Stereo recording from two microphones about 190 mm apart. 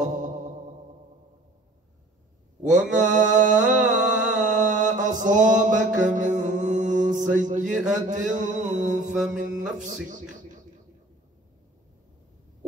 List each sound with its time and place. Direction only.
0.0 s mantra: 40° right (ahead or behind)
2.6 s mantra: 5° right (ahead or behind)
3.0 s a sound: 40° right (ahead or behind)
8.1 s mantra: 40° right (ahead or behind)
9.1 s mantra: 5° right (ahead or behind)
10.0 s mantra: 40° right (ahead or behind)